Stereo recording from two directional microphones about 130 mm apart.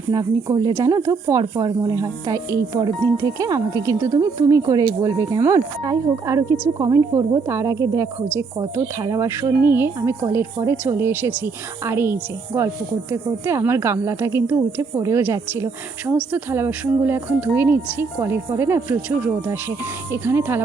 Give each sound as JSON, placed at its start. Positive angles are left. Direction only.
{"t": 0.1, "sound": "a woman's voice", "side_deg": -35}